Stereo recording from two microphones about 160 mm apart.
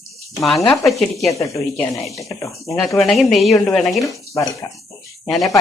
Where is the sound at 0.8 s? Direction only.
Centre (ahead or behind).